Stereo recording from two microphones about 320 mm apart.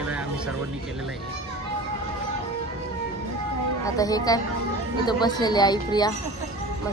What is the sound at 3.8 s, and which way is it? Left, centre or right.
Speech, centre.